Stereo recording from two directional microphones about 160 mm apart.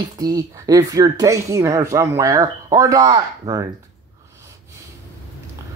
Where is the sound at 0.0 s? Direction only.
25° right (ahead or behind).